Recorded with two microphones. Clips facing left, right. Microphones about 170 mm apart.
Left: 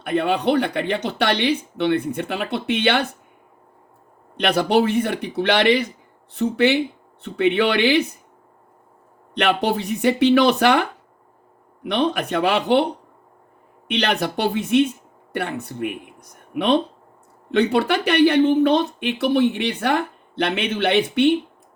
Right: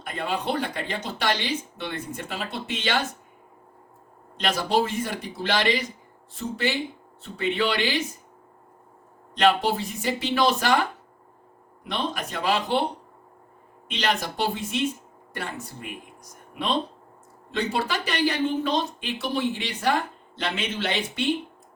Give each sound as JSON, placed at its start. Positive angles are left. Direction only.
{"t": 0.0, "sound": "speech", "side_deg": 65}
{"t": 4.4, "sound": "speech", "side_deg": 65}
{"t": 9.3, "sound": "speech", "side_deg": 65}
{"t": 13.8, "sound": "speech", "side_deg": 65}